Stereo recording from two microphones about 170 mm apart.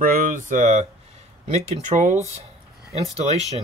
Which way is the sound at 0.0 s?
55° right (ahead or behind).